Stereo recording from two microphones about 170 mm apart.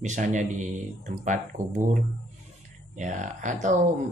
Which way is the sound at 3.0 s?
45° right (ahead or behind).